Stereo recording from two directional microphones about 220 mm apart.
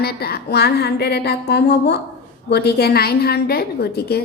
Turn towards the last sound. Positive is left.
turn(degrees=45)  # may be behind; listen again after turning